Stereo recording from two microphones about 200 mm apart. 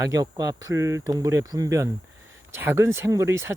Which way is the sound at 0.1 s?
15° right (ahead or behind).